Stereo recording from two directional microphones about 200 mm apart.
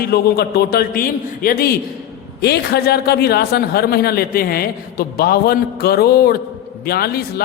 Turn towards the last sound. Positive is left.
turn(degrees=50)  # may be behind; listen again after turning